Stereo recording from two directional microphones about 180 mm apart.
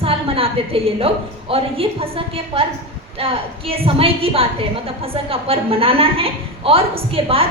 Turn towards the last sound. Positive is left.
turn(degrees=-30)  # may be behind; listen again after turning